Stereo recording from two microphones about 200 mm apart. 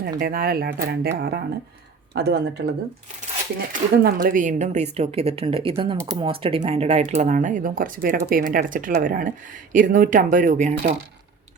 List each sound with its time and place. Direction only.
0.0 s speech: 50° right (ahead or behind)
3.7 s speech: 45° right (ahead or behind)